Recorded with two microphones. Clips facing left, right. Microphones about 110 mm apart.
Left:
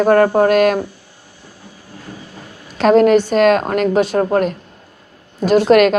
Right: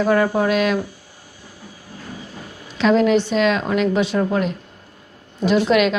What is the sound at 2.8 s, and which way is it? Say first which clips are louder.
A woman's voice: left 5 dB; 50° left (ahead or behind).